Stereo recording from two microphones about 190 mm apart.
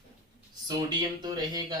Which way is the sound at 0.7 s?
20° right (ahead or behind).